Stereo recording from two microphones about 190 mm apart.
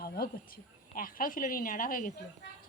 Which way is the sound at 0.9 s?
50° left (ahead or behind).